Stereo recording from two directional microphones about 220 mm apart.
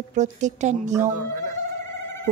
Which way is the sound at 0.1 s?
35° right (ahead or behind).